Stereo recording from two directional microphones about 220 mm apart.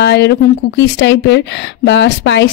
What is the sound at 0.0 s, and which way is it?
Speech, 50° left (ahead or behind).